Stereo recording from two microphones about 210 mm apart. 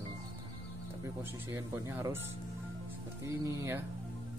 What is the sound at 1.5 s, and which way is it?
Speech, 10° right (ahead or behind).